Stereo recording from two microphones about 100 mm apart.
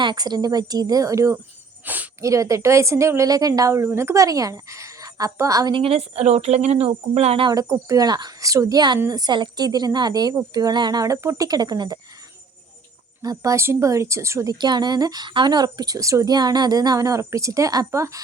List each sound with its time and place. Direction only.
0.0 s speech: 45° right (ahead or behind)
1.8 s speech: 15° right (ahead or behind)
2.2 s speech: 30° right (ahead or behind)
5.7 s speech: 70° right (ahead or behind)
7.5 s speech: 30° right (ahead or behind)
13.2 s speech: 35° right (ahead or behind)
14.6 s speech: 45° right (ahead or behind)